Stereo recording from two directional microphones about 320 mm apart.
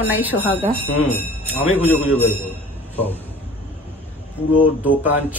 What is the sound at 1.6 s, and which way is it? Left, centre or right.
Speech, centre.